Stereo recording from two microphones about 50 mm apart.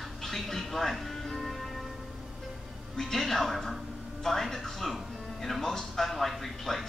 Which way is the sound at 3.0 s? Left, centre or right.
Centre.